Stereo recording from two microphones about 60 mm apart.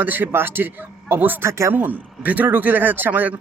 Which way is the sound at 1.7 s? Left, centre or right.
Right.